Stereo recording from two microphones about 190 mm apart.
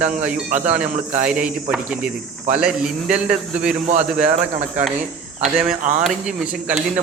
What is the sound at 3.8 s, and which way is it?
Speech, 35° right (ahead or behind).